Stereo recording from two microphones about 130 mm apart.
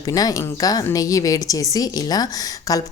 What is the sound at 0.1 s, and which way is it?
Speech, 30° left (ahead or behind).